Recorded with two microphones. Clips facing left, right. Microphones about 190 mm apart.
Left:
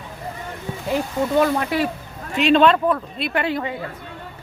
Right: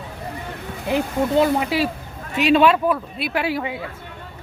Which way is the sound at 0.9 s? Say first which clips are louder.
Right 1 dB; 15° right (ahead or behind).